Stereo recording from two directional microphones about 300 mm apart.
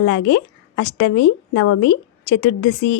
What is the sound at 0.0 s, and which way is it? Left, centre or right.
A woman's voice, left.